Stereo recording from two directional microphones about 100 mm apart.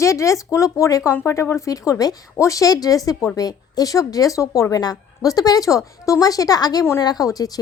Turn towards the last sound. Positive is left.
turn(degrees=40)  # may be behind; listen again after turning